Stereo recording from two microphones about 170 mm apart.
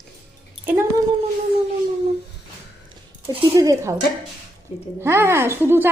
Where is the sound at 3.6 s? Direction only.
20° right (ahead or behind).